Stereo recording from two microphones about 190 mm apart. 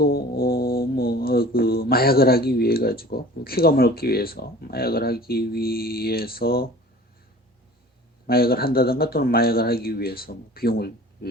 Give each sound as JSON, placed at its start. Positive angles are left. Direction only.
{"t": 0.0, "sound": "music", "side_deg": 50}
{"t": 8.3, "sound": "speech", "side_deg": 55}